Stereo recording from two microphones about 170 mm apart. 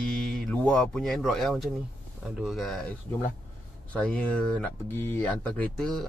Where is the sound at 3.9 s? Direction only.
5° left (ahead or behind).